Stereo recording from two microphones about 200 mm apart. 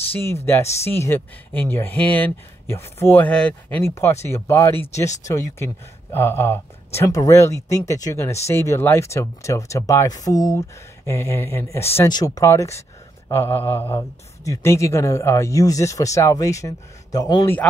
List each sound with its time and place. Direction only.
0.1 s speech: 10° left (ahead or behind)